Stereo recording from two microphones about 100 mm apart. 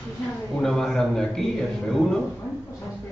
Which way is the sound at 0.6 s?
5° left (ahead or behind).